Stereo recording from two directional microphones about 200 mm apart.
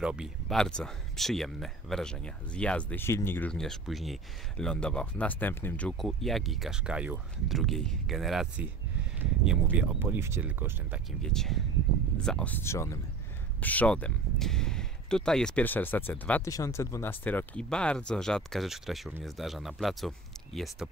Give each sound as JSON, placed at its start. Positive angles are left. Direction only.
{"t": 0.0, "sound": "speech", "side_deg": -5}
{"t": 11.1, "sound": "speech", "side_deg": 0}